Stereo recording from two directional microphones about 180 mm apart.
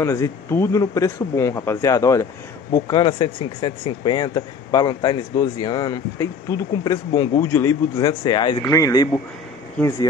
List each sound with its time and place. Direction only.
0.0 s speech: 15° left (ahead or behind)